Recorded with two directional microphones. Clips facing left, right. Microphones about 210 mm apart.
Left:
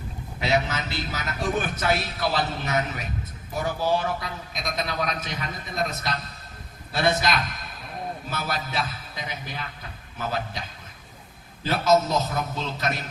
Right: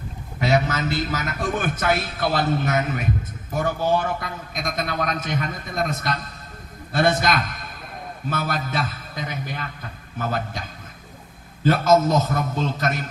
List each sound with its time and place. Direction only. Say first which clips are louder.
0.3 s a man's voice: right 4 dB; 50° right (ahead or behind)
11.6 s a man's voice: right 4 dB; 50° right (ahead or behind)